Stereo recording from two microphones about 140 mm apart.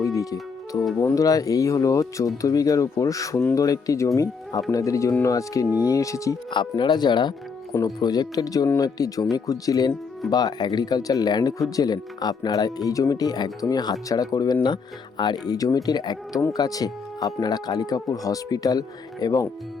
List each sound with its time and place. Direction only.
0.0 s music: 25° left (ahead or behind)
0.9 s speech: 20° left (ahead or behind)
6.5 s speech: 35° left (ahead or behind)